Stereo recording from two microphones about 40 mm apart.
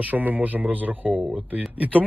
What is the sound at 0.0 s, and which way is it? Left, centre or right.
Speech, right.